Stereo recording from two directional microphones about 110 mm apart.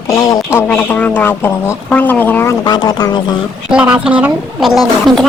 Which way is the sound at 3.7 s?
10° right (ahead or behind).